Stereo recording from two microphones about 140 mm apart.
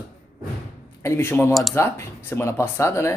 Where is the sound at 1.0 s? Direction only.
20° left (ahead or behind).